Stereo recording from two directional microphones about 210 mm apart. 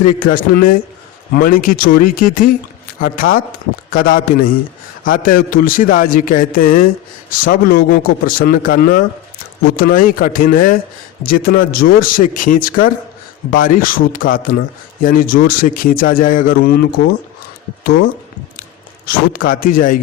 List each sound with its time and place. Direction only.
0.2 s a man's voice: 40° left (ahead or behind)